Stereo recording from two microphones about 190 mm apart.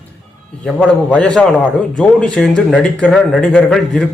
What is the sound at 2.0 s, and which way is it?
Speech, 5° left (ahead or behind).